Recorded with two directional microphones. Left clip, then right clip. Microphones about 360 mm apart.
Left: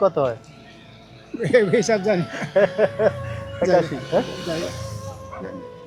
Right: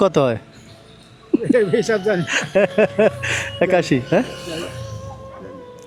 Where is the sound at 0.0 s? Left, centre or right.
Right.